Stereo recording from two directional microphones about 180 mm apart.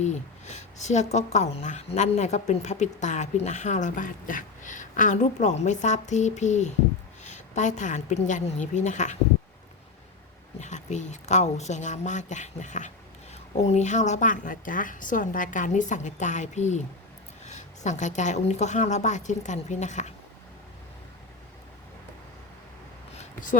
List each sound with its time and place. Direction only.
0.0 s speech: 40° left (ahead or behind)
10.6 s a woman's voice: 40° left (ahead or behind)
23.1 s a sound: 45° left (ahead or behind)